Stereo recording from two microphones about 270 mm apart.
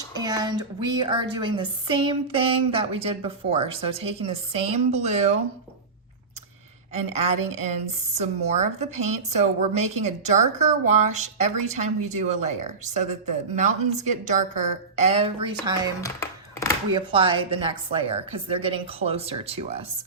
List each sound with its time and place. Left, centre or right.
0.1 s a woman's voice: centre
6.9 s a woman's voice: right
16.0 s a sound: centre
16.9 s a woman's voice: centre